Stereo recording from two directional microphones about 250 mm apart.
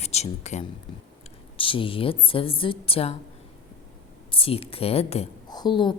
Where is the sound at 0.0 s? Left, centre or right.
Left.